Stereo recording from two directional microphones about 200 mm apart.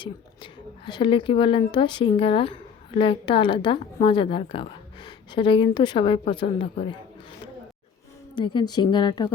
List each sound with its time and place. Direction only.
0.0 s a woman's voice: 25° left (ahead or behind)
8.4 s a woman's voice: 25° left (ahead or behind)